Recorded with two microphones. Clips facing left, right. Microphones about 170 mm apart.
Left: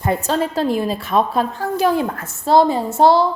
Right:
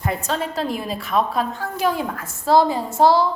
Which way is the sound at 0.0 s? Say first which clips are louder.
Left 5 dB; 35° left (ahead or behind).